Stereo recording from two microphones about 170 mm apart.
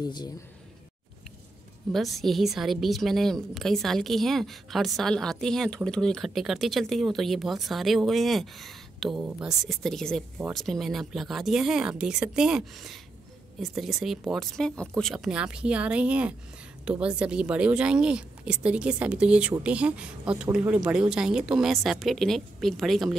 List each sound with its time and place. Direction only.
0.0 s speech: 25° left (ahead or behind)
1.9 s a woman's voice: centre (ahead or behind)